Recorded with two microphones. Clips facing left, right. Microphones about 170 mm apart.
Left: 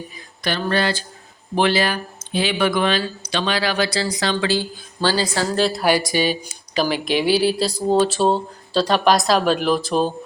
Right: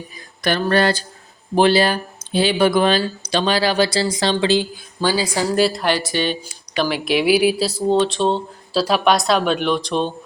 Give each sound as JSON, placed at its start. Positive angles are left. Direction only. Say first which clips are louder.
{"t": 0.4, "sound": "a sound", "louder": "right 4 dB", "side_deg": -50}
{"t": 1.5, "sound": "speech", "louder": "right 4 dB", "side_deg": -35}
{"t": 5.0, "sound": "a woman's voice", "louder": "right 1 dB", "side_deg": -10}
{"t": 5.7, "sound": "speech", "louder": "left 2 dB", "side_deg": 10}